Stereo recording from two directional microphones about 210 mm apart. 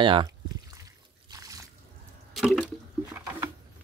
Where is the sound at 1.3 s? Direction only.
15° right (ahead or behind).